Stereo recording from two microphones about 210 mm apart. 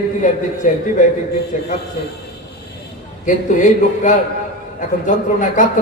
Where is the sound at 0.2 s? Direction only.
35° left (ahead or behind).